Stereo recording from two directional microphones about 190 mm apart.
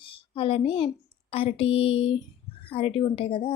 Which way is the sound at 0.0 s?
30° left (ahead or behind).